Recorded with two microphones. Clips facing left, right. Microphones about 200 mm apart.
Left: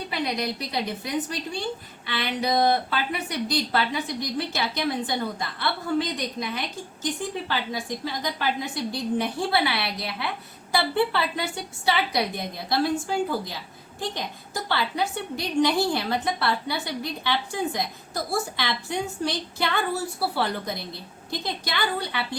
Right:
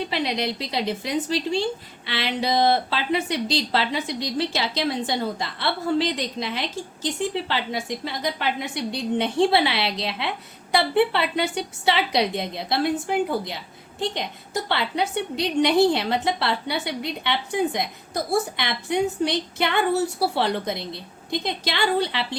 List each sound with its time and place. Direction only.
0.1 s a woman's voice: 25° right (ahead or behind)